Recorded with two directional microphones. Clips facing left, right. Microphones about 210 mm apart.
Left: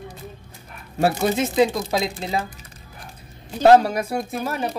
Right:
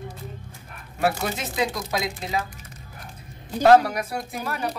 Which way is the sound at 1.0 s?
30° left (ahead or behind).